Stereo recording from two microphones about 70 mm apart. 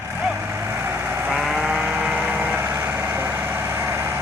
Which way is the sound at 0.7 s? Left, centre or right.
Right.